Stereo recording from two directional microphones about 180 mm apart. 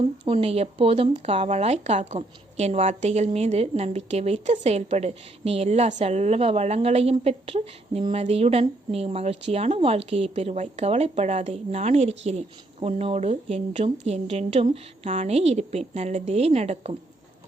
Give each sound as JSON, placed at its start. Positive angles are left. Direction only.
{"t": 0.0, "sound": "speech", "side_deg": -30}